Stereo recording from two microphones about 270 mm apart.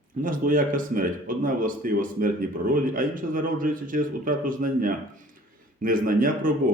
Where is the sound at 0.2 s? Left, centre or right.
Right.